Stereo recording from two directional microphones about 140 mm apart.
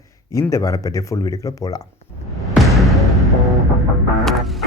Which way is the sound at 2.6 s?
Centre (ahead or behind).